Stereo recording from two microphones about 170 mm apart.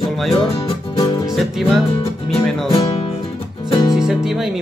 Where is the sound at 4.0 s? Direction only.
5° right (ahead or behind).